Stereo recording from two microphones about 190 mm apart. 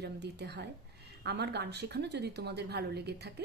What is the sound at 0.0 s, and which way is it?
Speech, 60° right (ahead or behind).